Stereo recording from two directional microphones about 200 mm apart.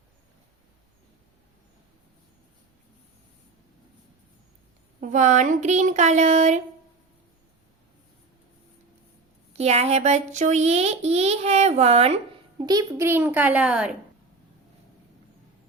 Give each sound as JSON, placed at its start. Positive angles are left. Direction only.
{"t": 4.9, "sound": "a child's voice", "side_deg": -40}
{"t": 9.5, "sound": "a child's voice", "side_deg": -30}
{"t": 12.6, "sound": "speech", "side_deg": -15}